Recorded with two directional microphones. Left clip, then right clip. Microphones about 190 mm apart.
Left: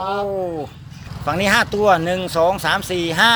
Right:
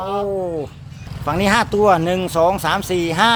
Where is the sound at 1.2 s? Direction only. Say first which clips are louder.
Even; 20° right (ahead or behind).